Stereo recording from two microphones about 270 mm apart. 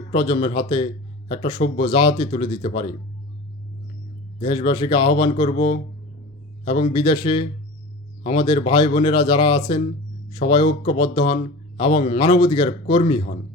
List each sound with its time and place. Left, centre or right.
0.1 s speech: centre
4.4 s a man's voice: centre